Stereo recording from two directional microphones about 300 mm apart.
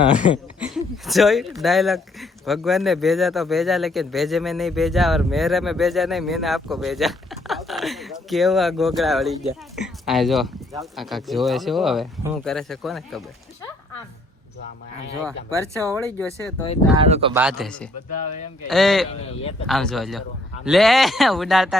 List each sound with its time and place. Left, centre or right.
0.6 s speech: centre
15.4 s speech: centre
16.1 s speech: centre
17.0 s speech: centre
17.3 s speech: centre
19.2 s speech: centre
19.6 s speech: centre